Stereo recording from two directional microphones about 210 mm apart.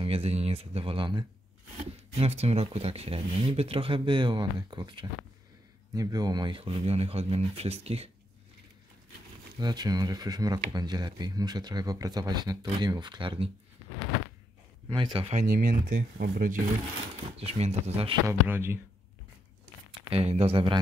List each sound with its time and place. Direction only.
0.0 s speech: 25° right (ahead or behind)
9.6 s speech: 20° right (ahead or behind)
14.9 s speech: 20° right (ahead or behind)
15.4 s speech: 45° right (ahead or behind)
17.4 s speech: 30° right (ahead or behind)
18.2 s speech: 10° right (ahead or behind)
20.0 s speech: 30° right (ahead or behind)